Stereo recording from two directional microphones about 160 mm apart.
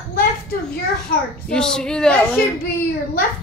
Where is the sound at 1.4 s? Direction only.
5° left (ahead or behind).